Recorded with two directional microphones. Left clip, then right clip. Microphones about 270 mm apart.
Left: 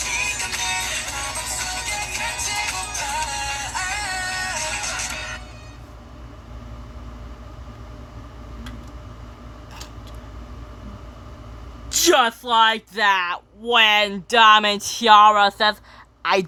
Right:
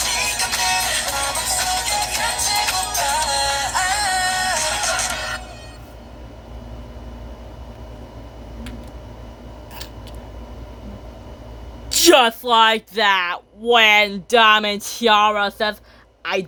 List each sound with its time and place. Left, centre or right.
0.0 s music: right
11.9 s speech: centre